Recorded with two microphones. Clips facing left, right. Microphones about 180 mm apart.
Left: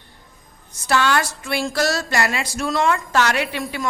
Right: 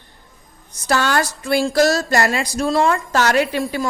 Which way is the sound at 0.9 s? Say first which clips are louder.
Right 1 dB; 40° right (ahead or behind).